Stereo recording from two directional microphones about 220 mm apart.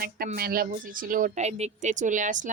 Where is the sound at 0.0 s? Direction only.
45° right (ahead or behind).